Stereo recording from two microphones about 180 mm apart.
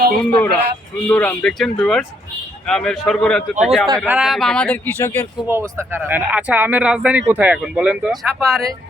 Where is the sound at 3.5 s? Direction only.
40° right (ahead or behind).